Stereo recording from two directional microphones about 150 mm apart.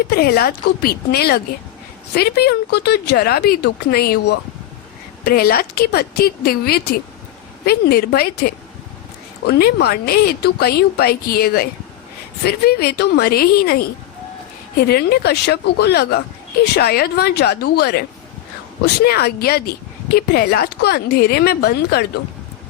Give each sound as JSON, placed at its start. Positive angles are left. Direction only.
{"t": 0.1, "sound": "speech", "side_deg": 90}